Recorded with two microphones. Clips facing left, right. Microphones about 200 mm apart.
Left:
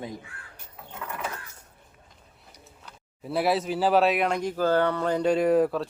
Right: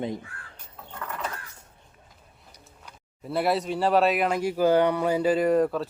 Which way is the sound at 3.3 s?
Centre (ahead or behind).